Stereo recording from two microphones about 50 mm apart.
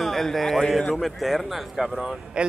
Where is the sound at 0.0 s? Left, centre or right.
Centre.